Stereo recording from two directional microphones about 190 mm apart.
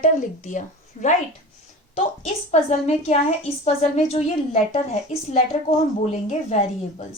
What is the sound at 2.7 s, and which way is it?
Speech, 35° left (ahead or behind).